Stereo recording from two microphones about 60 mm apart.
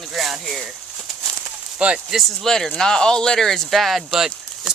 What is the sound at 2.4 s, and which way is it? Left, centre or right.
Speech, centre.